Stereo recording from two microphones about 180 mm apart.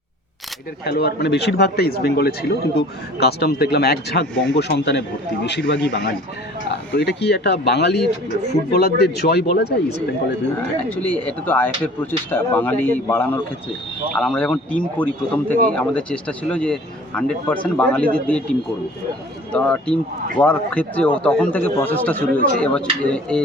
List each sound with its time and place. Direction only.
0.9 s speech: 60° left (ahead or behind)
10.8 s speech: 10° left (ahead or behind)
19.5 s speech: 5° left (ahead or behind)